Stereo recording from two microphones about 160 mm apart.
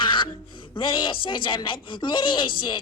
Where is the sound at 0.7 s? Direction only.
30° left (ahead or behind).